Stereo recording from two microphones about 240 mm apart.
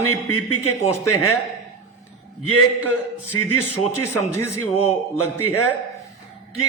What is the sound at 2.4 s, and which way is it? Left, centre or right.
A man's voice, left.